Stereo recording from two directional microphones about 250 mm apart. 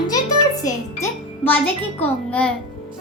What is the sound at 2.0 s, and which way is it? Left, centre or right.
Speech, centre.